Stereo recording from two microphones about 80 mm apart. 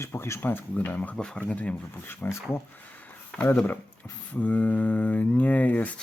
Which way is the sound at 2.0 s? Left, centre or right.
Left.